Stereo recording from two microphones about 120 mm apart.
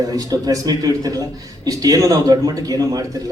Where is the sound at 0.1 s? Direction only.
30° right (ahead or behind).